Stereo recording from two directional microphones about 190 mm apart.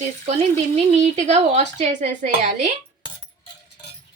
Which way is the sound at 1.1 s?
35° right (ahead or behind).